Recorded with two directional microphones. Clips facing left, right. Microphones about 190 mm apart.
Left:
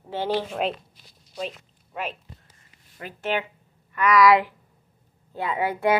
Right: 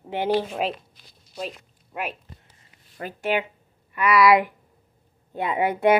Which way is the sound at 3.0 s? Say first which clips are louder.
Right 4 dB; 45° right (ahead or behind).